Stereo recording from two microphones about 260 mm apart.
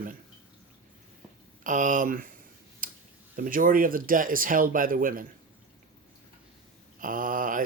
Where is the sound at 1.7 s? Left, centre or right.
Right.